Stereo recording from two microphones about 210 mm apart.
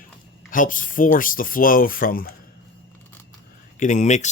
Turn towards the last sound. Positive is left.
turn(degrees=35)  # may be behind; listen again after turning